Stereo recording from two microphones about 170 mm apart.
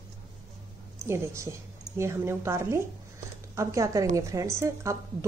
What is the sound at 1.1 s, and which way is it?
A woman's voice, 15° right (ahead or behind).